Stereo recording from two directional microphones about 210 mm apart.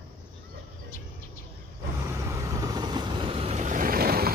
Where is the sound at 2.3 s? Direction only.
15° right (ahead or behind).